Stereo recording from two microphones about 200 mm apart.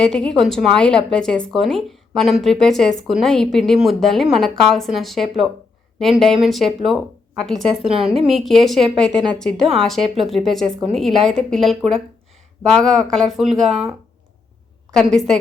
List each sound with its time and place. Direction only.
0.0 s speech: 5° left (ahead or behind)
7.9 s a woman's voice: 30° right (ahead or behind)
8.2 s speech: centre (ahead or behind)
14.9 s speech: centre (ahead or behind)